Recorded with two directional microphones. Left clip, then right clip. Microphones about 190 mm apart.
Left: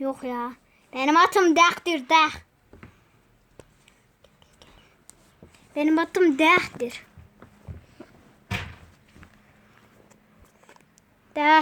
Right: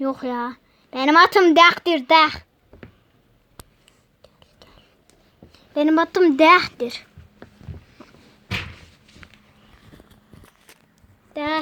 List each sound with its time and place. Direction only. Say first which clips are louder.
0.0 s a child's voice: right 4 dB; 20° right (ahead or behind)
5.7 s a woman's voice: right 4 dB; 15° right (ahead or behind)
9.2 s a sound: right 7 dB; centre (ahead or behind)
11.3 s a woman's voice: left 6 dB; 40° left (ahead or behind)